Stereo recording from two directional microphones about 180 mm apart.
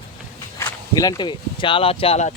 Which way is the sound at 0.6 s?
20° left (ahead or behind).